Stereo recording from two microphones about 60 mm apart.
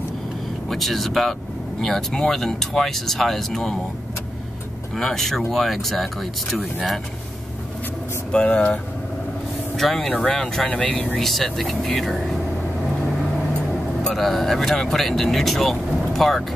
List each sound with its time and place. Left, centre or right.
0.7 s speech: centre
4.9 s speech: centre
8.3 s speech: centre
9.8 s speech: centre
11.1 s speech: centre
14.0 s speech: centre